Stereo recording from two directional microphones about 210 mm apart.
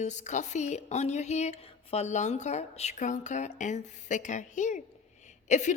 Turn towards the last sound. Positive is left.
turn(degrees=35)  # may be behind; listen again after turning